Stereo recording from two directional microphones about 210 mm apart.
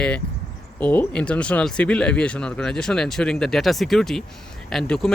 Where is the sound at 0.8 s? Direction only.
5° left (ahead or behind).